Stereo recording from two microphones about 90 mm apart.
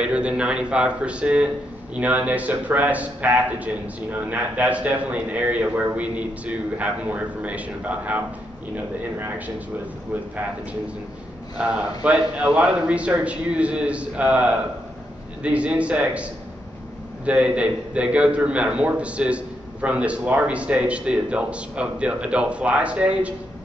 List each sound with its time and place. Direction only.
0.0 s a man's voice: 10° right (ahead or behind)
11.5 s a man's voice: 15° right (ahead or behind)